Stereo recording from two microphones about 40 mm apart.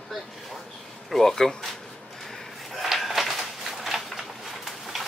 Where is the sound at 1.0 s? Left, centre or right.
Centre.